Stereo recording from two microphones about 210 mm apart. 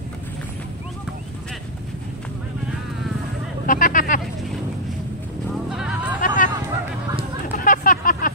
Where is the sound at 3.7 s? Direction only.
40° left (ahead or behind).